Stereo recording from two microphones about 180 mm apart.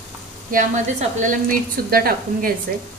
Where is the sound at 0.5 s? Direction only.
45° right (ahead or behind).